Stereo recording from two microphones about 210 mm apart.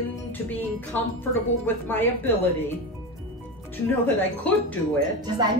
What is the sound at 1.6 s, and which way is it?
Speech, 10° left (ahead or behind).